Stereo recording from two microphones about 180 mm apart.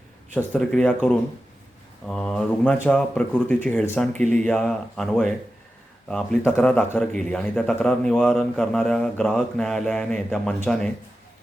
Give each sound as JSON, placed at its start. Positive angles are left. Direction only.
{"t": 0.3, "sound": "a man's voice", "side_deg": 5}